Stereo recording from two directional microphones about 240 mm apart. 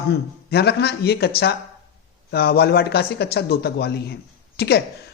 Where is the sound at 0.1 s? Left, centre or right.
Left.